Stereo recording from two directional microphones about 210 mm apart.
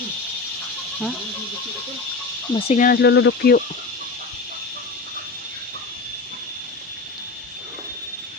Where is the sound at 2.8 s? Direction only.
50° left (ahead or behind).